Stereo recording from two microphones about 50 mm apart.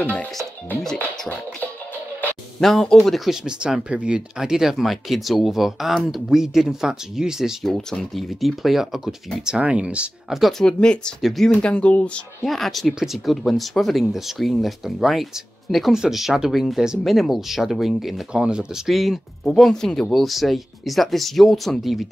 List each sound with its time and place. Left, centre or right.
0.0 s speech: left
2.6 s speech: centre
3.0 s speech: centre
3.4 s speech: centre
4.4 s speech: centre
6.2 s speech: centre
7.6 s speech: centre; by 10.0 s right
10.6 s speech: centre
11.1 s speech: centre
11.6 s speech: left
12.4 s speech: centre
18.3 s speech: centre
18.9 s speech: centre
20.1 s speech: centre